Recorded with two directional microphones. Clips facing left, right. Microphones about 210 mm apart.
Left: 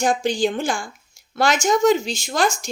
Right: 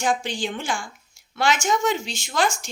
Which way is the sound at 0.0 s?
40° left (ahead or behind).